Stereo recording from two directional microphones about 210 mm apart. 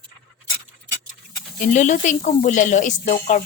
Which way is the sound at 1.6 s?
35° left (ahead or behind).